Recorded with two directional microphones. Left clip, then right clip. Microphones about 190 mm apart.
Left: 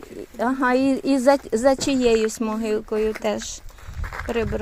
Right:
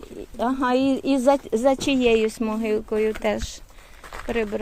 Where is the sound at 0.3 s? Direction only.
10° left (ahead or behind).